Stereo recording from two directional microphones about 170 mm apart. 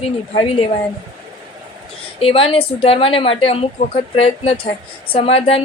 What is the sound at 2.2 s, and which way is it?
A woman's voice, 35° left (ahead or behind).